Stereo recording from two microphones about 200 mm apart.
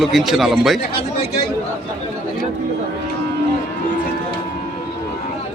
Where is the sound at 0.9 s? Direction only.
25° left (ahead or behind).